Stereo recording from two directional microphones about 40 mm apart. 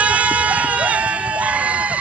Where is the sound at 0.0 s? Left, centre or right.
Right.